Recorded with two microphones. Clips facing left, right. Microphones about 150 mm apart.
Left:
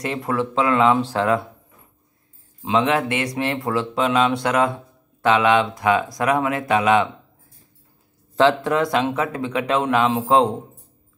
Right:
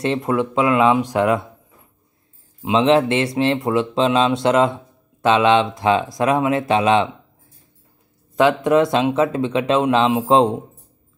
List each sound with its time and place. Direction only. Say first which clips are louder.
0.0 s speech: right 4 dB; 25° right (ahead or behind)
2.6 s speech: right 4 dB; 20° right (ahead or behind)
8.4 s speech: right 3 dB; 20° right (ahead or behind)